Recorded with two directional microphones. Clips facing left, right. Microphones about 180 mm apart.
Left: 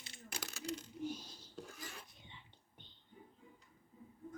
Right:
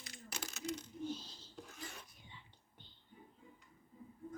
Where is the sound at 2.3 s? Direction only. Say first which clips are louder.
Even; 20° left (ahead or behind).